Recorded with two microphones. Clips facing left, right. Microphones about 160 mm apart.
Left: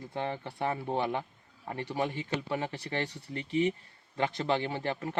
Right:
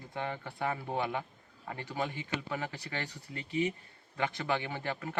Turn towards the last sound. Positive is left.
turn(degrees=30)  # may be behind; listen again after turning